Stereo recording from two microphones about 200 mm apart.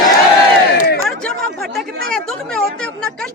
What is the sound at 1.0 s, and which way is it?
Chatter, centre (ahead or behind).